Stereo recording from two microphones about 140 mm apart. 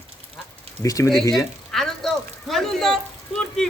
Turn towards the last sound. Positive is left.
turn(degrees=5)  # may be behind; listen again after turning